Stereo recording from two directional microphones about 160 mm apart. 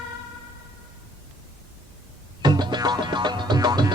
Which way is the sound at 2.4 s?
25° right (ahead or behind).